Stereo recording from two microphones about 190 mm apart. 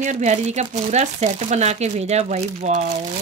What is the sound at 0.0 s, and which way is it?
Speech, 40° right (ahead or behind).